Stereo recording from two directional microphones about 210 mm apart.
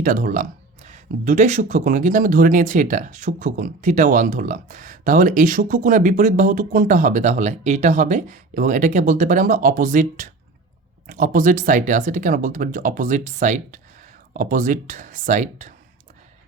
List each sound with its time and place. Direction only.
0.0 s speech: 40° right (ahead or behind)